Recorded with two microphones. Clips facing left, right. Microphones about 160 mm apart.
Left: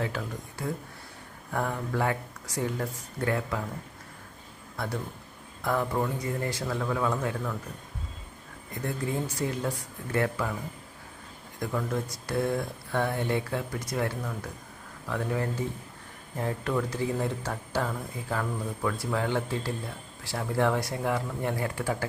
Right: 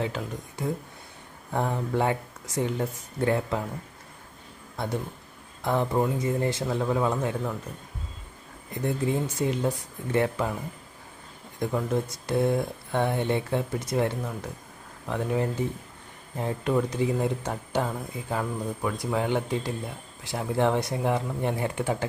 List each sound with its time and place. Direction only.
0.0 s speech: 20° right (ahead or behind)
5.6 s speech: 25° right (ahead or behind)
8.8 s speech: 20° right (ahead or behind)
11.6 s speech: 20° right (ahead or behind)